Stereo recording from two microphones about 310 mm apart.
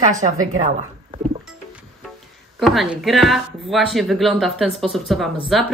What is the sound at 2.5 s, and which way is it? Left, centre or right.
A woman's voice, centre.